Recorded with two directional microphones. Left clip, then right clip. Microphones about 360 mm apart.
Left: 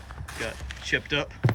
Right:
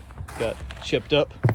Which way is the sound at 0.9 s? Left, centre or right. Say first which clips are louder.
Right 5 dB; centre.